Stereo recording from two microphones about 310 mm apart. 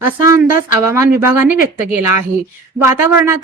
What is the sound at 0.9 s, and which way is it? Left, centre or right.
Speech, centre.